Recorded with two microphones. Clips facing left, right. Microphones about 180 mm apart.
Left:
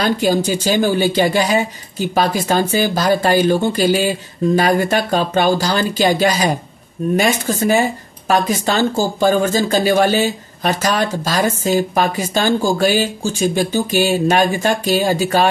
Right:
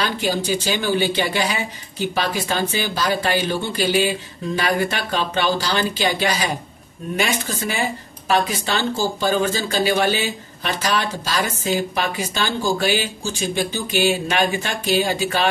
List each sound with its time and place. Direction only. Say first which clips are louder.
0.0 s speech: left 6 dB; 45° left (ahead or behind)